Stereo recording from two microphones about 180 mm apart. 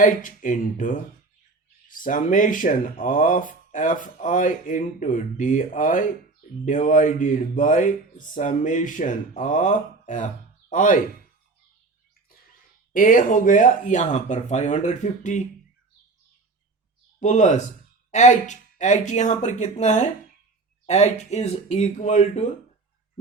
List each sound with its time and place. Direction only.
0.0 s speech: 45° left (ahead or behind)
12.9 s speech: 50° left (ahead or behind)
17.2 s speech: 40° left (ahead or behind)